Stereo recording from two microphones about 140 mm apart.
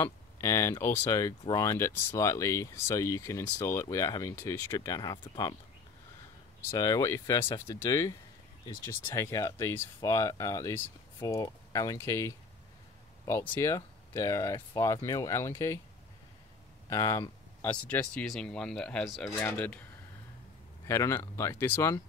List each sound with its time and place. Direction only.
0.0 s speech: 20° left (ahead or behind)
6.7 s speech: 20° left (ahead or behind)
13.4 s speech: 15° left (ahead or behind)
16.9 s speech: 20° left (ahead or behind)
17.6 s speech: 10° left (ahead or behind)
19.2 s speech: 15° left (ahead or behind)